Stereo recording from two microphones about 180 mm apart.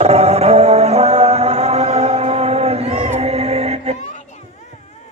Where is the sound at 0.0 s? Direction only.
35° right (ahead or behind).